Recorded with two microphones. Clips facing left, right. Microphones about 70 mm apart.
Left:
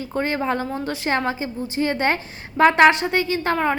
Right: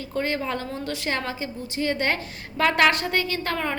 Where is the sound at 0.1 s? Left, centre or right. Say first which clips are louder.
Left 4 dB; left.